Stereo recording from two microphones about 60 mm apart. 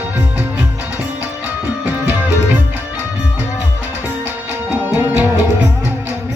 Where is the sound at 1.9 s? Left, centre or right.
Right.